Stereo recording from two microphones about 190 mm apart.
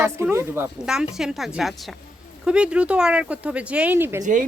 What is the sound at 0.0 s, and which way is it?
Speech, 15° right (ahead or behind).